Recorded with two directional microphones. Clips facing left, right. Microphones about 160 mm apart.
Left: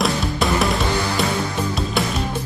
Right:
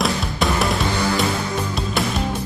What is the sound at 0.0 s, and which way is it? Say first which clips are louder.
Music: left 1 dB; centre (ahead or behind).